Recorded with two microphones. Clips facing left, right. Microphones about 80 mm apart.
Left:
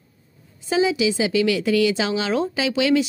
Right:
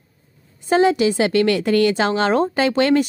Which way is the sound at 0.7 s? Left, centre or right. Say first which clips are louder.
Right 4 dB; right.